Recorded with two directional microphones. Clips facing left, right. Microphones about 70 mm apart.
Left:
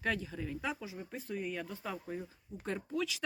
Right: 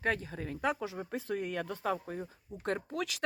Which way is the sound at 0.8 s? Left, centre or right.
Right.